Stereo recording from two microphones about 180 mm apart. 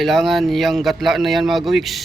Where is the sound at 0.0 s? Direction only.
Centre (ahead or behind).